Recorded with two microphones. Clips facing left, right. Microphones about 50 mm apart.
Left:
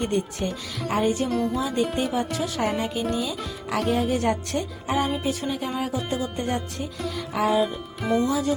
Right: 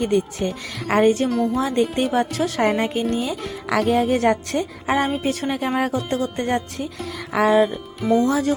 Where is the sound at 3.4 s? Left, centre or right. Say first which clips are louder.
Right 5 dB; right.